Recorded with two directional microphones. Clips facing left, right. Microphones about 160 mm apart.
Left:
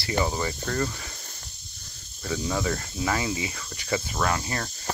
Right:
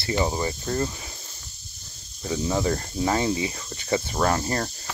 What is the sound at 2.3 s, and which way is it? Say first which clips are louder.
Speech: right 3 dB; 25° right (ahead or behind).